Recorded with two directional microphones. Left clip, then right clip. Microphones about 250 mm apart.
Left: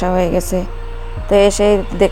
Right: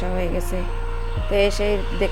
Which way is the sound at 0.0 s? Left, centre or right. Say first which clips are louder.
Left 10 dB; left.